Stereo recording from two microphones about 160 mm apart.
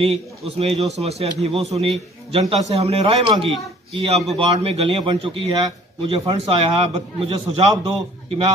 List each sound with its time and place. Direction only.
0.0 s a man's voice: 35° right (ahead or behind)